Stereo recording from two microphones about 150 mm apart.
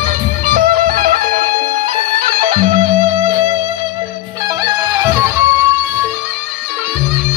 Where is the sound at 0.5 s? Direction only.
65° right (ahead or behind).